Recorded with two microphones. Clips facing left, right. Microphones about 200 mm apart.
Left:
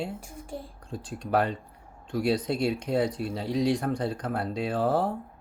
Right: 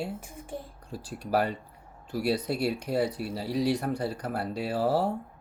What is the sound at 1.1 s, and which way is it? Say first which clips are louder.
A child's voice: left 1 dB; 5° right (ahead or behind).